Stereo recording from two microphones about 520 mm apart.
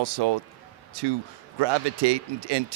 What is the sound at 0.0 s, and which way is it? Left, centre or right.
Speech, right.